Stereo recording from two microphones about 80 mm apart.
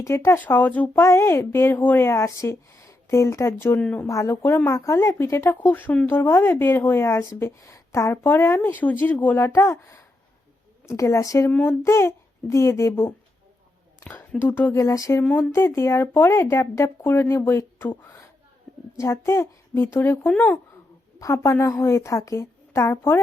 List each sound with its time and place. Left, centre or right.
0.0 s speech: left
1.0 s speech: left
3.8 s speech: centre
4.1 s speech: left
5.6 s speech: left
6.1 s speech: left
8.2 s speech: left
9.4 s a child's voice: left
14.0 s a woman's voice: left
14.7 s speech: left
15.4 s speech: left
18.9 s speech: left